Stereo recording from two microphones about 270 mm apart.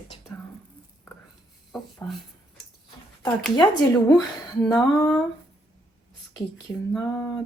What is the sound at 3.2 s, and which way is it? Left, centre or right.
Speech, centre.